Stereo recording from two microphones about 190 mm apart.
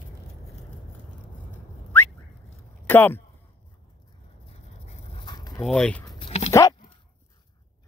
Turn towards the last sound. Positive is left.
turn(degrees=30)  # may be behind; listen again after turning